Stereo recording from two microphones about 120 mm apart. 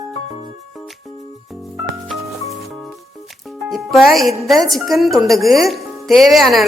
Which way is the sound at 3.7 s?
Centre (ahead or behind).